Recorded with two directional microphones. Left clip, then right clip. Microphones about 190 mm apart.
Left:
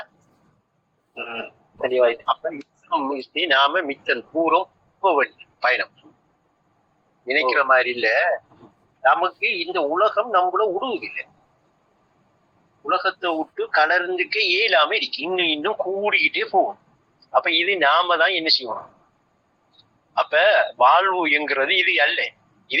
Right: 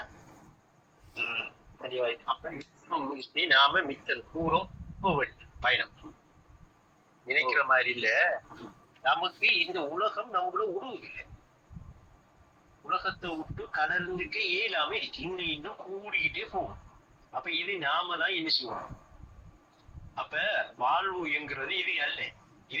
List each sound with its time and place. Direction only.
2.0 s a man's voice: 20° left (ahead or behind)
7.3 s speech: 20° left (ahead or behind)
12.9 s speech: 25° left (ahead or behind)
13.7 s a woman's voice: 40° left (ahead or behind)
20.1 s a woman's voice: 40° left (ahead or behind)